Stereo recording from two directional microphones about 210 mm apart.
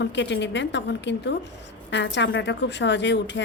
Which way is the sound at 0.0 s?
55° left (ahead or behind).